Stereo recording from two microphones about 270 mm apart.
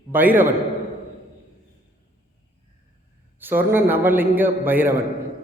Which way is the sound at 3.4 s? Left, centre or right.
Centre.